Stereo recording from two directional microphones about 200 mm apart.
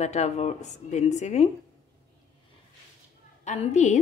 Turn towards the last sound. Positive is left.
turn(degrees=35)  # may be behind; listen again after turning